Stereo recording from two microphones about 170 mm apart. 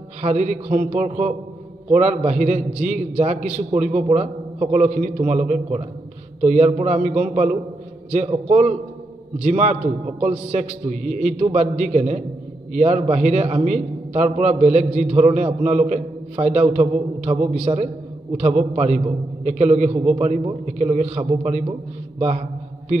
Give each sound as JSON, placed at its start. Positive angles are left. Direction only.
{"t": 0.2, "sound": "a man's voice", "side_deg": -45}